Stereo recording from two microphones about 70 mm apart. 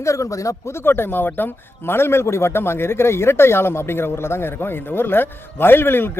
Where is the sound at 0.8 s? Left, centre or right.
Left.